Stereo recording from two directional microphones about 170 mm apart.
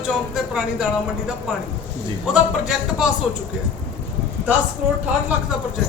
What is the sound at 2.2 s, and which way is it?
Speech, 5° right (ahead or behind).